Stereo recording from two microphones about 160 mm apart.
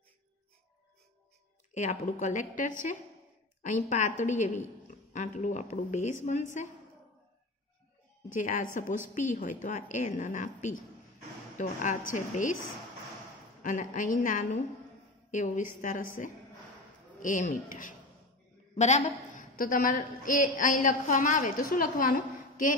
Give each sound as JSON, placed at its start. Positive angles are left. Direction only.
{"t": 1.7, "sound": "a woman's voice", "side_deg": 45}
{"t": 8.4, "sound": "a woman's voice", "side_deg": 55}
{"t": 13.6, "sound": "a woman's voice", "side_deg": 55}
{"t": 18.8, "sound": "a woman's voice", "side_deg": 45}
{"t": 19.5, "sound": "a woman's voice", "side_deg": 60}